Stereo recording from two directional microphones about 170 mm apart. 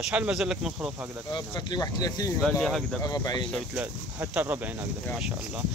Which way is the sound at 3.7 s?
10° right (ahead or behind).